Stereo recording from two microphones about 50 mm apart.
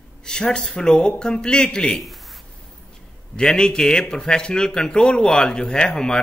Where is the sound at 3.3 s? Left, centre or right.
Centre.